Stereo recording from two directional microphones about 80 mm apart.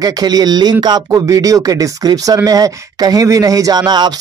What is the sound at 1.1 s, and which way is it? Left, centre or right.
Speech, right.